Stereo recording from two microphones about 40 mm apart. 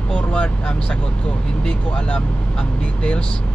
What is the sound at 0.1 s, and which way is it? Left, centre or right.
Speech, left.